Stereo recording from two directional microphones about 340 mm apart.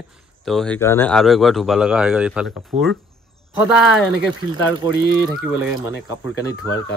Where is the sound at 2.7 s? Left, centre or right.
Centre.